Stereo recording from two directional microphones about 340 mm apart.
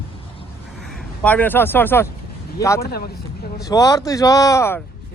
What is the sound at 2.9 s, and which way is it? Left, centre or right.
Speech, left.